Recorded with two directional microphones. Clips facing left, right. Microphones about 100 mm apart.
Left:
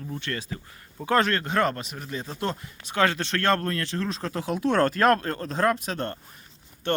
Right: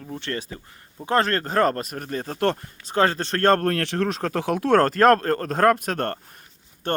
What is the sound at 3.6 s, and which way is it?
Speech, 65° right (ahead or behind).